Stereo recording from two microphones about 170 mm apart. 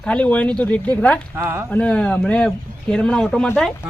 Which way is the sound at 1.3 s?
15° right (ahead or behind).